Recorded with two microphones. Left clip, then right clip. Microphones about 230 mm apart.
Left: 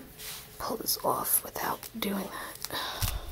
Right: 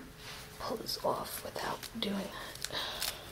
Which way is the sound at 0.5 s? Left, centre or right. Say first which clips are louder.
Left 4 dB; left.